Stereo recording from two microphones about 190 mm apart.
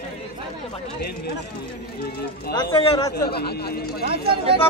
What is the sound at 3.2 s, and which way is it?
Speech, 55° left (ahead or behind).